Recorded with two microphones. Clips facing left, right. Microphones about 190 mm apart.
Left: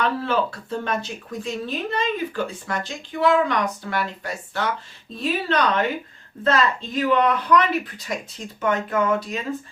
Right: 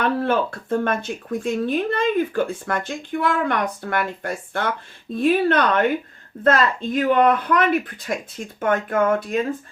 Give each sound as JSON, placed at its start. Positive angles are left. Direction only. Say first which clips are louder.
{"t": 0.0, "sound": "speech", "louder": "right 2 dB", "side_deg": -50}